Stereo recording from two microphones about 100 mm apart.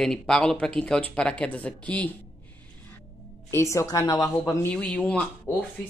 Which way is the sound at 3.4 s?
30° left (ahead or behind).